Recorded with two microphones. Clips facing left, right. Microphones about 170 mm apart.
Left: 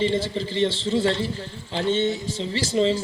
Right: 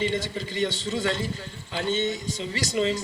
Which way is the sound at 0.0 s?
30° left (ahead or behind).